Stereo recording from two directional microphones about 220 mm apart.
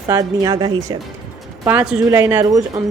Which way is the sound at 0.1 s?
15° right (ahead or behind).